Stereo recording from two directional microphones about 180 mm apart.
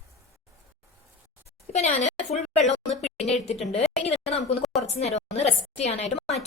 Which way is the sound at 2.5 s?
40° left (ahead or behind).